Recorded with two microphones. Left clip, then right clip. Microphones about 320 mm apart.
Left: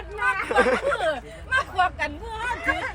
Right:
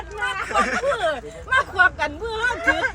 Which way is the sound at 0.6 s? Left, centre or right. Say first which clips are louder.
Even; centre.